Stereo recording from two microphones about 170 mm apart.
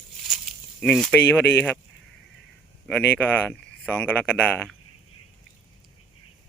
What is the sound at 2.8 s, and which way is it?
Speech, 10° left (ahead or behind).